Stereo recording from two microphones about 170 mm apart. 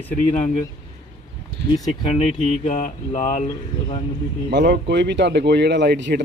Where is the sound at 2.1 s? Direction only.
40° left (ahead or behind).